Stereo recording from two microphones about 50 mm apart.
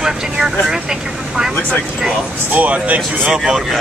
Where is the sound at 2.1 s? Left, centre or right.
Right.